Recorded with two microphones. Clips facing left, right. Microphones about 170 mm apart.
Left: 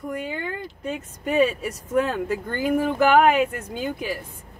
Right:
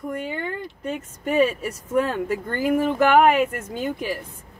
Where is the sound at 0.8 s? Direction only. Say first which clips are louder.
Right 1 dB; centre (ahead or behind).